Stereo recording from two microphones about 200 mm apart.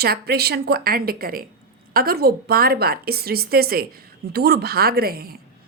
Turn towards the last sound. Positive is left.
turn(degrees=-50)  # may be behind; listen again after turning